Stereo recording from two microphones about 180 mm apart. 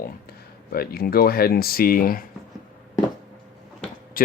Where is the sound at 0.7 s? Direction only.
55° left (ahead or behind).